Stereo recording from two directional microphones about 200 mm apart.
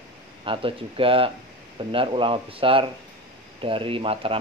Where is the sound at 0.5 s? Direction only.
25° right (ahead or behind).